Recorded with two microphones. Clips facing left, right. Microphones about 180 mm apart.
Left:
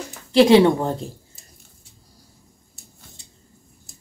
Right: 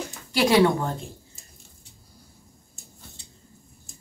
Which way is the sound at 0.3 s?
25° left (ahead or behind).